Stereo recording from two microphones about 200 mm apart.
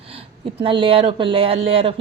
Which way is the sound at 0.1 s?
25° right (ahead or behind).